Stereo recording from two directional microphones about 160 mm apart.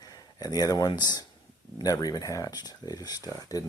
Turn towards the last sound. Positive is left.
turn(degrees=20)  # may be behind; listen again after turning